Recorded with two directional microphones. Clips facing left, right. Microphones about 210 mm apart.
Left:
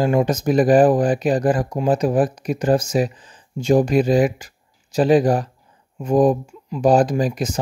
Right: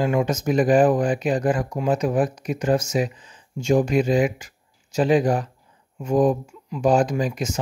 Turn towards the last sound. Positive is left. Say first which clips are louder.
# left 3 dB
turn(degrees=35)  # may be behind; listen again after turning